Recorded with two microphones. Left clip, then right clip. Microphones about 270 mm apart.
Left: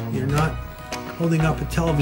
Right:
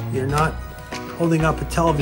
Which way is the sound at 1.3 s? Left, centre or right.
Centre.